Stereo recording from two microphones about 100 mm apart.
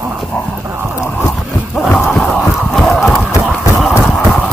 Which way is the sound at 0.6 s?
20° right (ahead or behind).